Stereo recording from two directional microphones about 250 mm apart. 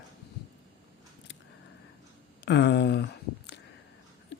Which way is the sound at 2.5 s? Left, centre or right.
Left.